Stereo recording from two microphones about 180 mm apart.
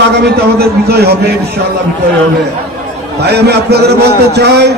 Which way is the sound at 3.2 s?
65° right (ahead or behind).